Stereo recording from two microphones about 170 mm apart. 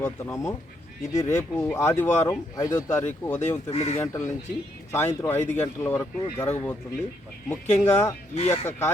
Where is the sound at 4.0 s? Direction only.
15° left (ahead or behind).